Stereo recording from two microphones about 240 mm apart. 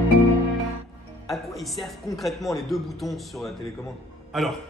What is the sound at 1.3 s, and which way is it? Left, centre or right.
Speech, centre.